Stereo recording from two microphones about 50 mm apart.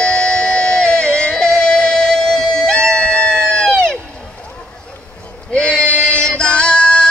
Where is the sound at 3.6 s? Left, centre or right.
Centre.